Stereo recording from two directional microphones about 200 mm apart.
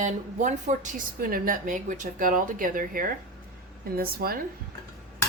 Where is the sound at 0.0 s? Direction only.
40° right (ahead or behind).